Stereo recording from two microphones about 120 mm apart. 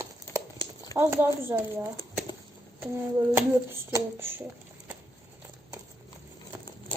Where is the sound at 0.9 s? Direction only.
20° right (ahead or behind).